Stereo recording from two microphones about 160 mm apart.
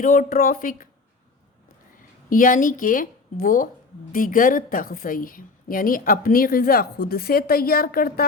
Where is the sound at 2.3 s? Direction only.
55° left (ahead or behind).